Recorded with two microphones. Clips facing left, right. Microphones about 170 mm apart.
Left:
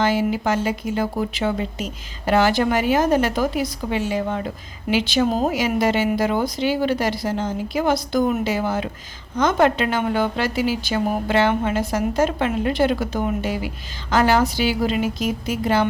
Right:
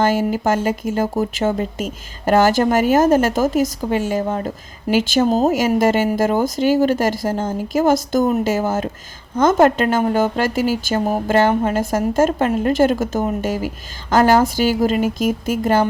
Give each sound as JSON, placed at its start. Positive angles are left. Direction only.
{"t": 0.0, "sound": "speech", "side_deg": -45}